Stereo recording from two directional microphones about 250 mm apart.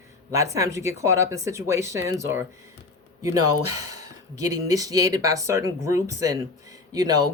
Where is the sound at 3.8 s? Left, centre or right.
Right.